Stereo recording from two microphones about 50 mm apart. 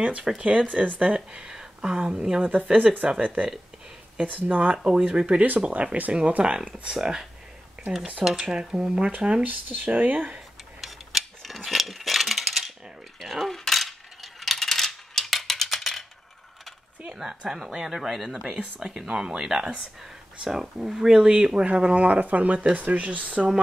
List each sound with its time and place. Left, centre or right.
0.0 s speech: right
1.4 s speech: centre
2.5 s speech: right
4.5 s speech: right
9.5 s speech: right
10.8 s a sound: centre
13.2 s coin: centre
17.0 s speech: centre
18.6 s speech: centre